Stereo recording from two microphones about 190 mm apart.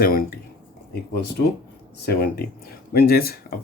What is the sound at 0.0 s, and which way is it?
Speech, 50° left (ahead or behind).